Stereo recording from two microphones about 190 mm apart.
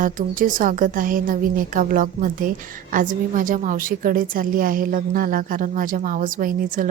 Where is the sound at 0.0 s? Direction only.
45° right (ahead or behind).